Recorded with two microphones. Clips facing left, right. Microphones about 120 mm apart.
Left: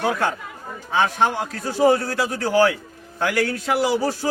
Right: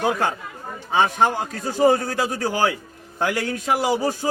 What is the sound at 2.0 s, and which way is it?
Speech, 15° right (ahead or behind).